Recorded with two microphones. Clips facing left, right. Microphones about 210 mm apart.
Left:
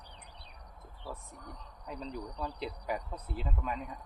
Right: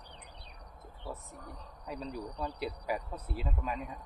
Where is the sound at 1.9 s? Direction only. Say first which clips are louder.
Right 1 dB; 10° right (ahead or behind).